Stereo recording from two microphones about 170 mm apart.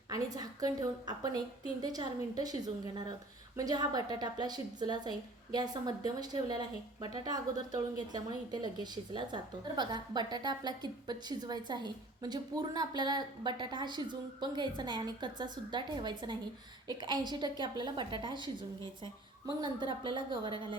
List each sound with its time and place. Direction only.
0.1 s a woman's voice: 20° right (ahead or behind)
19.6 s a woman's voice: 30° right (ahead or behind)